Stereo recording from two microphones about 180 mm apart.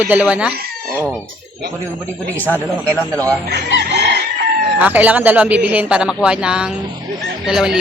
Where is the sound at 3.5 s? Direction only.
90° right.